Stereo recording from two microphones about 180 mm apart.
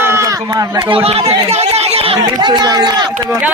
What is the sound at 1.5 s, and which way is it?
Chatter, 35° right (ahead or behind).